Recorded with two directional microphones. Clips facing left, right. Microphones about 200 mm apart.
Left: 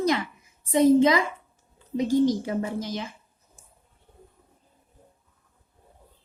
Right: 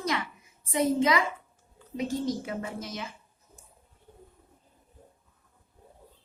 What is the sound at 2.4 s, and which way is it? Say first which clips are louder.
Speech: left 7 dB; 30° left (ahead or behind).